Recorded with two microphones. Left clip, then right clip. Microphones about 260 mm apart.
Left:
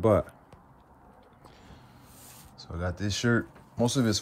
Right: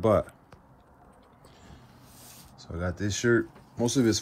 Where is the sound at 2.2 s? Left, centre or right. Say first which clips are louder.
Even; centre.